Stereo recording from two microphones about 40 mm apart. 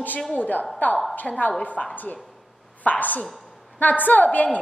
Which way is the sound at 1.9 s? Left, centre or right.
Left.